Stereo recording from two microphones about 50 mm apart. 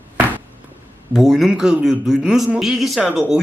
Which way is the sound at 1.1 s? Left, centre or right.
Centre.